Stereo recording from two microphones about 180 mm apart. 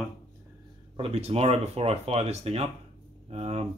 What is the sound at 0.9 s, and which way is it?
Speech, 35° right (ahead or behind).